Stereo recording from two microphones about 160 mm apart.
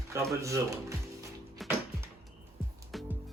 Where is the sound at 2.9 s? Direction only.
Centre (ahead or behind).